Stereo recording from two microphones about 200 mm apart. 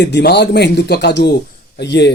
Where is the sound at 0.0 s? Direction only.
60° left (ahead or behind).